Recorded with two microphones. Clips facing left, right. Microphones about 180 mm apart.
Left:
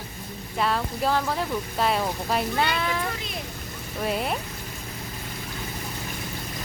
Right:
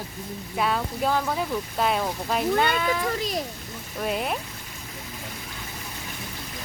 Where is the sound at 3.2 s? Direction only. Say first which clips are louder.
Right 7 dB; 40° right (ahead or behind).